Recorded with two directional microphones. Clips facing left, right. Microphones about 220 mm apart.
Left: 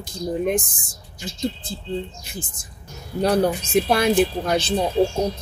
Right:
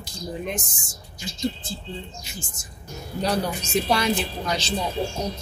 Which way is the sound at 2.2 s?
55° left (ahead or behind).